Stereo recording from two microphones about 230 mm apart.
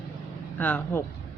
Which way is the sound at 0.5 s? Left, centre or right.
Centre.